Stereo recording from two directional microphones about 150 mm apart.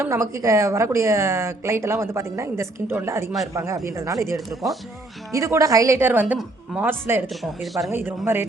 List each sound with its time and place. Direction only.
0.0 s a woman's voice: 20° right (ahead or behind)
7.4 s speech: centre (ahead or behind)
7.9 s a woman's voice: 15° right (ahead or behind)